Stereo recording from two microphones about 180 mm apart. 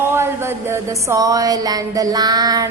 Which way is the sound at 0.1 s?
15° right (ahead or behind).